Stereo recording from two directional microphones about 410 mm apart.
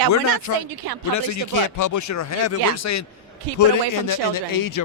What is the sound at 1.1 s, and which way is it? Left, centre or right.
A man's voice, left.